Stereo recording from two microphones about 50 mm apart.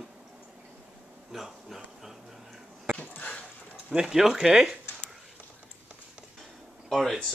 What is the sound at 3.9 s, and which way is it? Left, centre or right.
Speech, centre.